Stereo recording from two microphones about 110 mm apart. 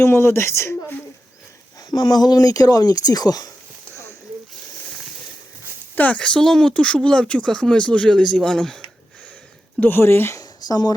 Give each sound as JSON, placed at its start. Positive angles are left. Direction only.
{"t": 0.0, "sound": "speech", "side_deg": 25}
{"t": 1.9, "sound": "speech", "side_deg": 35}
{"t": 6.0, "sound": "speech", "side_deg": 10}
{"t": 9.8, "sound": "speech", "side_deg": 20}
{"t": 10.4, "sound": "a sound", "side_deg": 35}